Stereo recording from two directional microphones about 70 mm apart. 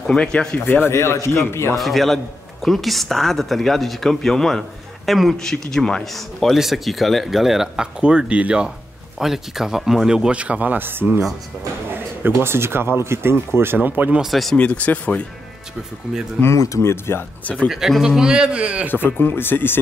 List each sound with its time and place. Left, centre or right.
0.0 s speech: centre
0.8 s speech: left
1.8 s speech: centre
9.2 s speech: centre; by 13.4 s right
13.7 s speech: right
14.2 s speech: centre
14.6 s speech: left
16.5 s speech: left
16.9 s speech: left
17.6 s speech: centre
18.9 s speech: left